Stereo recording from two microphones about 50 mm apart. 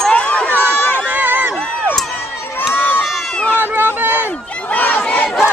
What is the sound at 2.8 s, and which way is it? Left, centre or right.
Run, left.